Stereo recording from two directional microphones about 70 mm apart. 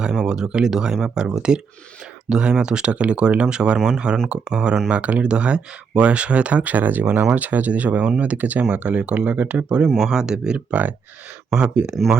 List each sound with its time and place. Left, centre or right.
0.0 s speech: centre
9.9 s speech: centre
11.9 s speech: centre